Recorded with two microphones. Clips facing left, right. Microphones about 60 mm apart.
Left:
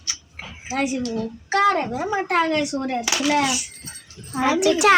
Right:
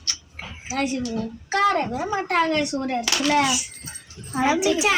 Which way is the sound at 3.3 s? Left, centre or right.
Centre.